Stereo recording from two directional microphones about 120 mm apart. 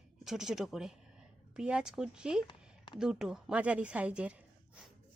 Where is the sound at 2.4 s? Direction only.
40° left (ahead or behind).